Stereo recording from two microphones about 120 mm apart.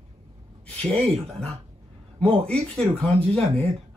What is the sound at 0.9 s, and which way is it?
Speech, 55° right (ahead or behind).